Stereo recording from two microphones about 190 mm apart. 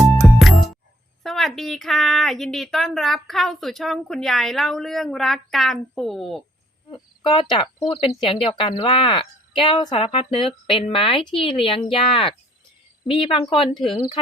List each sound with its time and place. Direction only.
0.2 s music: centre (ahead or behind)
1.2 s a woman's voice: centre (ahead or behind)
6.9 s a woman's voice: 25° left (ahead or behind)